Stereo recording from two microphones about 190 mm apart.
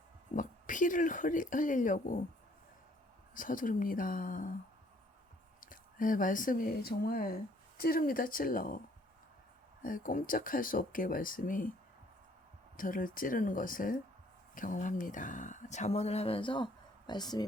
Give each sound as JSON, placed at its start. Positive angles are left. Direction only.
{"t": 0.3, "sound": "speech", "side_deg": 45}
{"t": 3.3, "sound": "speech", "side_deg": 45}
{"t": 5.5, "sound": "speech", "side_deg": 45}
{"t": 9.8, "sound": "speech", "side_deg": 45}
{"t": 12.7, "sound": "speech", "side_deg": 45}